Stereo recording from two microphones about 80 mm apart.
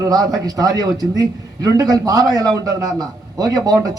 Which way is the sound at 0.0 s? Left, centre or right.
Right.